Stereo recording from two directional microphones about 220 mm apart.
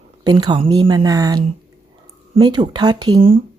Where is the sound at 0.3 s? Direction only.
20° right (ahead or behind).